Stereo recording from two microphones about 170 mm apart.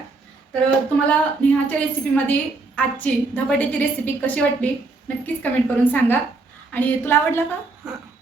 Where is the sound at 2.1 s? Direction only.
10° left (ahead or behind).